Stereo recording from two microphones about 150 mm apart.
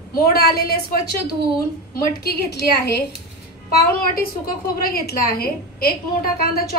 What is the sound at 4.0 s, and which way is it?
A woman's voice, 75° left (ahead or behind).